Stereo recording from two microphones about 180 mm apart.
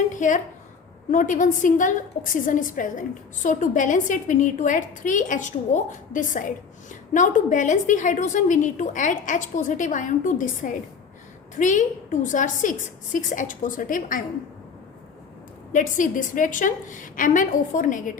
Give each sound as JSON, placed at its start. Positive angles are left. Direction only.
{"t": 0.2, "sound": "a woman's voice", "side_deg": 45}
{"t": 15.7, "sound": "a woman's voice", "side_deg": 45}